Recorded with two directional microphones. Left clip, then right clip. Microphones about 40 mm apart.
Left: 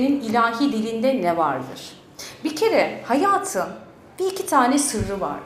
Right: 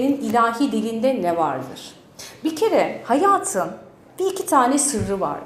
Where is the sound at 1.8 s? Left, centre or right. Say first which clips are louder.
Left 1 dB; right.